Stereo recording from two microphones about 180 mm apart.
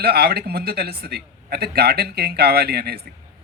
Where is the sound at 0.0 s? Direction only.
60° right (ahead or behind).